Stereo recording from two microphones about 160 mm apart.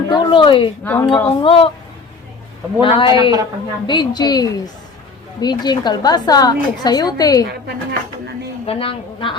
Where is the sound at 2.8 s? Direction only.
30° left (ahead or behind).